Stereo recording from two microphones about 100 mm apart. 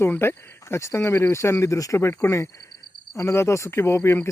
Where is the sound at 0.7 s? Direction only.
30° left (ahead or behind).